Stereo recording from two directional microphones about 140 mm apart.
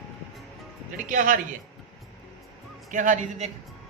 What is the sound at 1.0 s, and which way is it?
Speech, 75° right (ahead or behind).